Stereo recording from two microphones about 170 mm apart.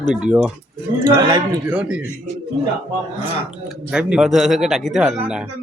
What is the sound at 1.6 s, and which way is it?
Speech, 5° right (ahead or behind).